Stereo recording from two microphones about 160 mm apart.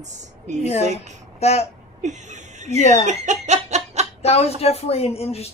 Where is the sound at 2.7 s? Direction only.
45° left (ahead or behind).